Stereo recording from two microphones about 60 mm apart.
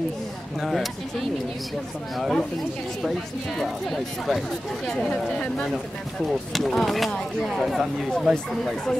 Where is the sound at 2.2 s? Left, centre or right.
Centre.